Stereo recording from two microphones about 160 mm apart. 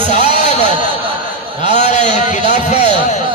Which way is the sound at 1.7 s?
45° left (ahead or behind).